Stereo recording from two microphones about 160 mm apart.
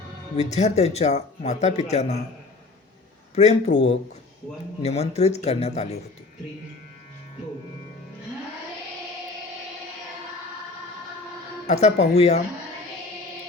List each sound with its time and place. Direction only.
0.3 s speech: 45° left (ahead or behind)
3.3 s speech: 45° left (ahead or behind)
4.8 s speech: 40° left (ahead or behind)
11.6 s speech: 45° left (ahead or behind)